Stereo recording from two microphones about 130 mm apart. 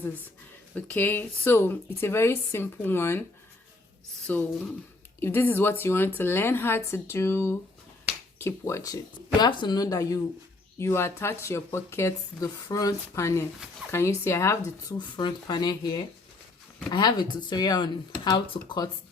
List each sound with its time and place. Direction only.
0.7 s speech: 10° left (ahead or behind)
4.3 s speech: 10° left (ahead or behind)
14.9 s speech: 35° left (ahead or behind)